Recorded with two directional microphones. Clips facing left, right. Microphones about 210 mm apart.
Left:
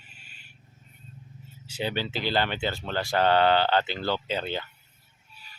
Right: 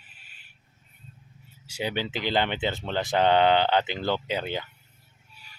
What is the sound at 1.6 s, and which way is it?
Speech, 10° right (ahead or behind).